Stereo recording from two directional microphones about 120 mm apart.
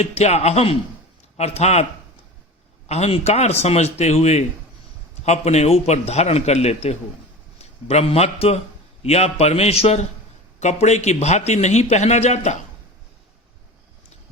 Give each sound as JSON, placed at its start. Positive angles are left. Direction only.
{"t": 0.0, "sound": "a man's voice", "side_deg": 65}